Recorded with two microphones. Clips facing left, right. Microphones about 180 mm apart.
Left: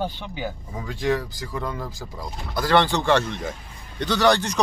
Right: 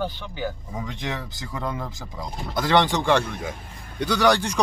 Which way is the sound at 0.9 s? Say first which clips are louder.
Left 13 dB; 20° right (ahead or behind).